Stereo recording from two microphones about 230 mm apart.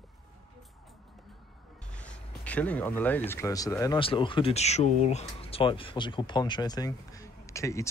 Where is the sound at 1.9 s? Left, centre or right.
Centre.